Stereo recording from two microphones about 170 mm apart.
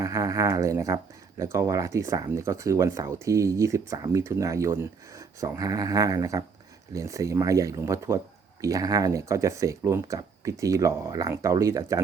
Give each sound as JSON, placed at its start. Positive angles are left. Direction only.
{"t": 0.0, "sound": "speech", "side_deg": -20}